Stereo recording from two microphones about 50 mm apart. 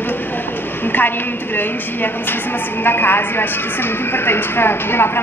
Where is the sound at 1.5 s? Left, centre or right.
Left.